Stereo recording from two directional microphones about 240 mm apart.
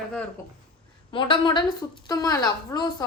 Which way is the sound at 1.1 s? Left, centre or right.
Left.